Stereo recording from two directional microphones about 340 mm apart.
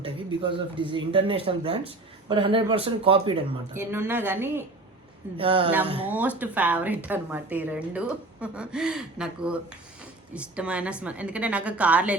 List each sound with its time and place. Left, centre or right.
0.4 s speech: centre
6.1 s a woman's voice: centre